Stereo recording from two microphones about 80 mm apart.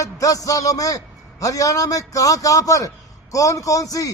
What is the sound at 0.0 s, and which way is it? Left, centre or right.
A man's voice, left.